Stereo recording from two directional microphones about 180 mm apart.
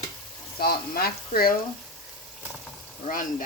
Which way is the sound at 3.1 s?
45° left (ahead or behind).